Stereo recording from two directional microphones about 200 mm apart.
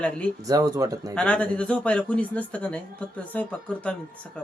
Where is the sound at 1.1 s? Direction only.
5° left (ahead or behind).